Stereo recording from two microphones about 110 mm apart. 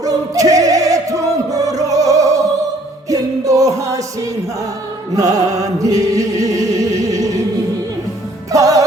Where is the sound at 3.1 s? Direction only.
30° right (ahead or behind).